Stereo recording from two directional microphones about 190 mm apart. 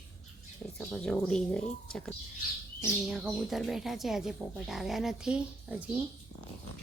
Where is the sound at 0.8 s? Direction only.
5° left (ahead or behind).